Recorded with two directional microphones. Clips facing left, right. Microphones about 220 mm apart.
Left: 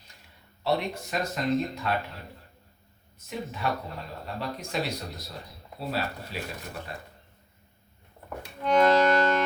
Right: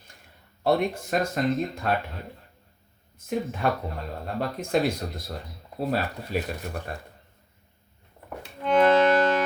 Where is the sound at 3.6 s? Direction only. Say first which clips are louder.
Right 4 dB; 50° right (ahead or behind).